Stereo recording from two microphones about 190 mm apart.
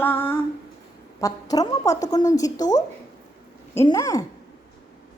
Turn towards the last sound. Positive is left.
turn(degrees=20)  # may be behind; listen again after turning